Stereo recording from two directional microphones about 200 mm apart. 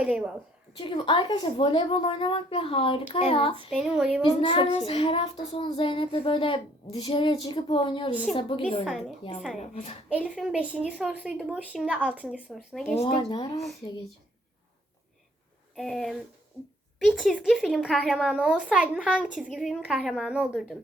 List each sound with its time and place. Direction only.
0.0 s a woman's voice: 5° right (ahead or behind)
0.8 s child singing: 25° left (ahead or behind)
3.7 s a woman's voice: centre (ahead or behind)
4.2 s child singing: 25° left (ahead or behind)
8.1 s a woman's voice: 5° right (ahead or behind)
8.4 s child singing: 25° left (ahead or behind)
8.8 s a woman's voice: centre (ahead or behind)
9.6 s a woman's voice: 35° left (ahead or behind)
10.1 s a woman's voice: 5° right (ahead or behind)
13.0 s child singing: 25° left (ahead or behind)
15.7 s a woman's voice: centre (ahead or behind)